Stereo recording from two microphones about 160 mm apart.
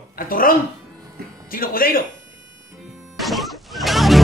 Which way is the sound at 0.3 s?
65° left (ahead or behind).